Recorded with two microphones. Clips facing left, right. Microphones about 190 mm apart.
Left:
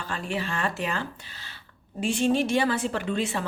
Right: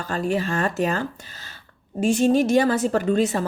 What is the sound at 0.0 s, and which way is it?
A woman's voice, 40° right (ahead or behind).